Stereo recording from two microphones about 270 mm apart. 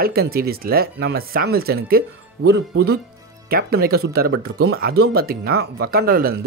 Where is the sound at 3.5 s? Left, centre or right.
Right.